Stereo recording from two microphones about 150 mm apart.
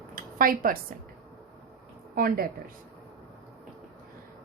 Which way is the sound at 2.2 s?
75° right (ahead or behind).